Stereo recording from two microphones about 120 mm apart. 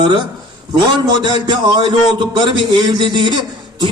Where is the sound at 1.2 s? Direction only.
40° right (ahead or behind).